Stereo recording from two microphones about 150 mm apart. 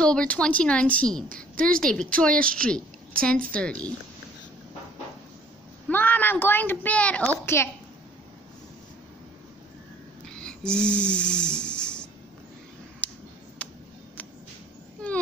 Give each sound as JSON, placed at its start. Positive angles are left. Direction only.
{"t": 0.0, "sound": "a woman's voice", "side_deg": 5}
{"t": 5.9, "sound": "a woman's voice", "side_deg": 10}
{"t": 10.2, "sound": "snoring", "side_deg": 5}
{"t": 13.0, "sound": "a sound", "side_deg": 10}